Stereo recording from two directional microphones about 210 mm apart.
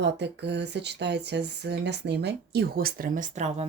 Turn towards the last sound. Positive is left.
turn(degrees=-30)  # may be behind; listen again after turning